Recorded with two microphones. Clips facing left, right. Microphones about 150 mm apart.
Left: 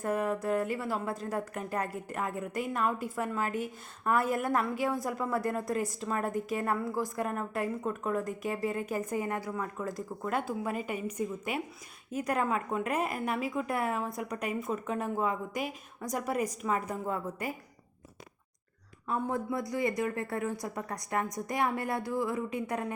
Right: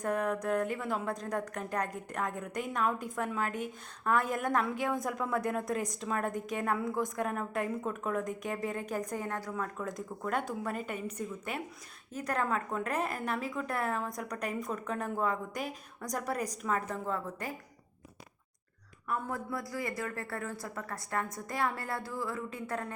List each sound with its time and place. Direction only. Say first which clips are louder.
0.0 s a woman's voice: left 1 dB; 5° left (ahead or behind)
19.0 s a woman's voice: left 4 dB; 20° left (ahead or behind)